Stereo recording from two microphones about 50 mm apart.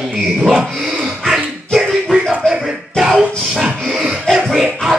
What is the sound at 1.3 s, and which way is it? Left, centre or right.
Dog, centre.